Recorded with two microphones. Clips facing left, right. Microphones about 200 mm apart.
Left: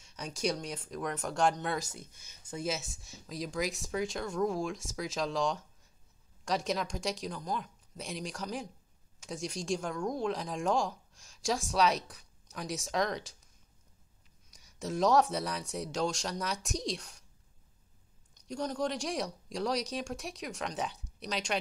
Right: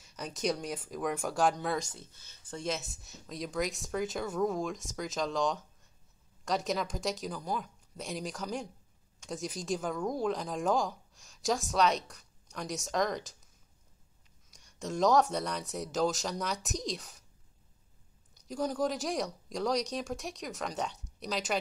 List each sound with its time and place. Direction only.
0.0 s speech: centre (ahead or behind)
14.5 s speech: 5° left (ahead or behind)
18.5 s speech: 5° right (ahead or behind)